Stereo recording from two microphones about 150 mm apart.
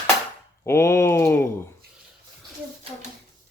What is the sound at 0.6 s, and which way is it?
Speech, 20° left (ahead or behind).